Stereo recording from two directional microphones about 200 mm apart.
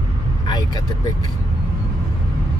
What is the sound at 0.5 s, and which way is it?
Speech, 20° left (ahead or behind).